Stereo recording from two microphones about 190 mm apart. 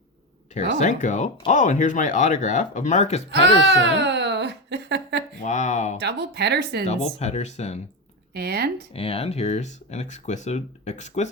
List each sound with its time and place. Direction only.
0.5 s speech: 40° left (ahead or behind)
3.7 s a sound: 65° right (ahead or behind)
5.4 s speech: 40° left (ahead or behind)
6.0 s speech: 60° right (ahead or behind)
6.8 s speech: 35° left (ahead or behind)
8.3 s speech: 60° right (ahead or behind)
8.9 s speech: 30° left (ahead or behind)